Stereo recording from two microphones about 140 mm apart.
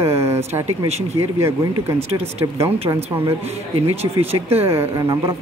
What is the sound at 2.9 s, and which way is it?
Speech, 30° right (ahead or behind).